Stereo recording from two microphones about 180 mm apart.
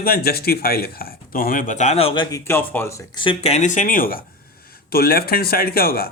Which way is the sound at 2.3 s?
15° left (ahead or behind).